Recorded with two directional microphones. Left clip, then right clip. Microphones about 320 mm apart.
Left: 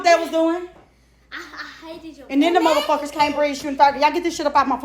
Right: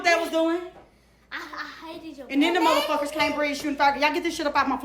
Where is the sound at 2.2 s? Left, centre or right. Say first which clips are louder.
Left 5 dB; centre.